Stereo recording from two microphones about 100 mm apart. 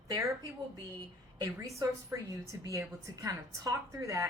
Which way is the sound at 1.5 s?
30° right (ahead or behind).